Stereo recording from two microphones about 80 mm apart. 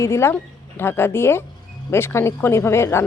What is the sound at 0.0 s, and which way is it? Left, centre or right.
Speech, left.